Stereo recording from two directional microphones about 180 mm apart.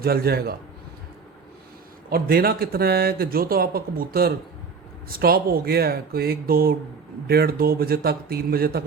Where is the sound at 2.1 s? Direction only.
55° right (ahead or behind).